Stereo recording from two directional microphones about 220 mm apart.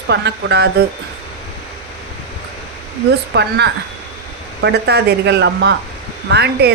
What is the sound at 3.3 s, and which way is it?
Speech, 50° right (ahead or behind).